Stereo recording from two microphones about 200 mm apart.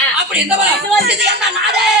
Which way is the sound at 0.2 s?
60° right (ahead or behind).